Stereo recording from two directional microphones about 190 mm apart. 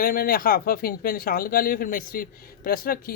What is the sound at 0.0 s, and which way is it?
Speech, 50° left (ahead or behind).